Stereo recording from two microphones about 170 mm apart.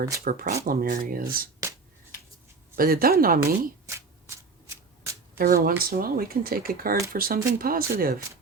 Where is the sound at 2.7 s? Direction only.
60° right (ahead or behind).